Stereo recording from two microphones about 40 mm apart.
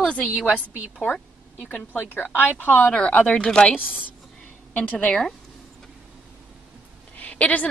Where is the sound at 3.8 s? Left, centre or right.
Right.